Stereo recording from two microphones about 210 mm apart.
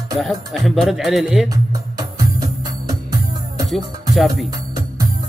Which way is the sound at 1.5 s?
15° right (ahead or behind).